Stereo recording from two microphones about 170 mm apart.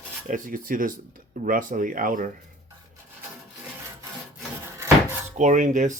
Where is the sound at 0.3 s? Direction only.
50° right (ahead or behind).